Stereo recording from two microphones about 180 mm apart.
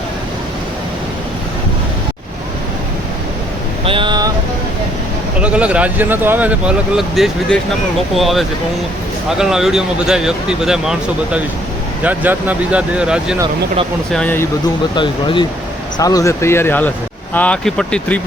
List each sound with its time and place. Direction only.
3.8 s vehicle: 25° right (ahead or behind)
5.4 s speech: 5° right (ahead or behind)
14.1 s speech: 10° left (ahead or behind)
14.9 s speech: 25° left (ahead or behind); by 18.2 s 5° left (ahead or behind)